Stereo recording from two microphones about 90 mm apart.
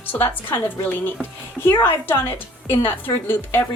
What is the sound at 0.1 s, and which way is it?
A woman's voice, 25° left (ahead or behind).